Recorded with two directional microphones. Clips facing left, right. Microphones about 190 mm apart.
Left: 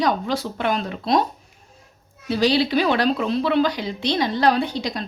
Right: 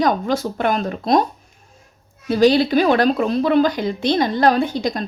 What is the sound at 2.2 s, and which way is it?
Speech, 50° right (ahead or behind).